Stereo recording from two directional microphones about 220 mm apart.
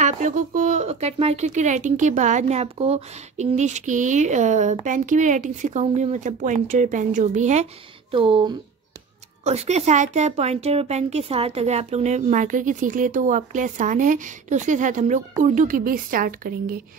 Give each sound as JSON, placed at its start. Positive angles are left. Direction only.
{"t": 0.0, "sound": "speech", "side_deg": -35}